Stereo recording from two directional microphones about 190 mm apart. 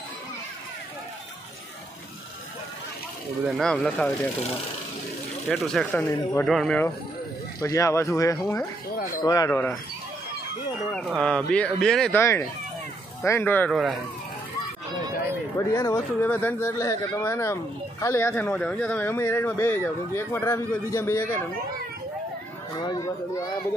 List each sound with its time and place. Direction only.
3.4 s speech: centre (ahead or behind)
5.5 s speech: centre (ahead or behind)
7.6 s speech: 15° left (ahead or behind)
10.9 s speech: centre (ahead or behind)
12.2 s speech: 15° left (ahead or behind)
15.5 s speech: 15° left (ahead or behind)
22.8 s speech: 20° left (ahead or behind)